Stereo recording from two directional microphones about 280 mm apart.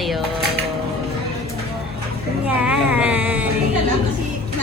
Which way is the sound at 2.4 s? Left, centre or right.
Centre.